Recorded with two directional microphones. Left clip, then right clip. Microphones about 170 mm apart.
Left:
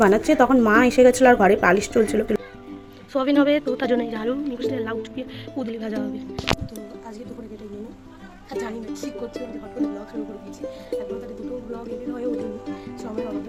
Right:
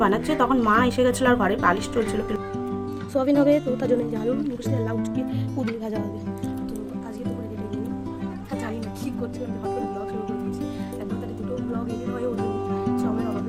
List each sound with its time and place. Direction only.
0.0 s a woman's voice: 20° left (ahead or behind)
3.1 s speech: 15° right (ahead or behind)